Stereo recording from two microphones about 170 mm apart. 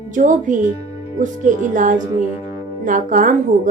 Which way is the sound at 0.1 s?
50° right (ahead or behind).